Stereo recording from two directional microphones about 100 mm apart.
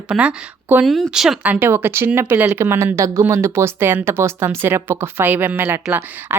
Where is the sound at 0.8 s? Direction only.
Centre (ahead or behind).